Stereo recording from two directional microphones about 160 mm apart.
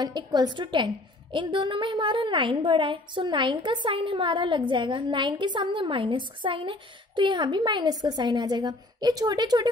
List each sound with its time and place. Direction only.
0.0 s a woman's voice: 25° right (ahead or behind)